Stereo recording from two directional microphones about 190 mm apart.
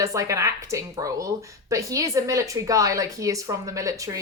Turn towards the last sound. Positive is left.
turn(degrees=-15)  # may be behind; listen again after turning